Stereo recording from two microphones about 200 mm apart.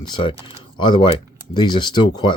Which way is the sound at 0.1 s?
25° left (ahead or behind).